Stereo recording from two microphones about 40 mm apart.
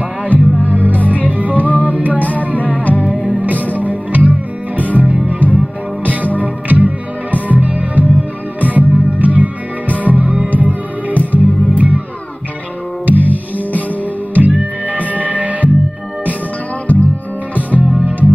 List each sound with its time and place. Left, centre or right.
0.2 s music: right
0.9 s music: left
1.2 s music: right
2.2 s music: left
3.7 s music: right
13.0 s music: right
14.3 s music: right
16.9 s music: right
17.6 s music: left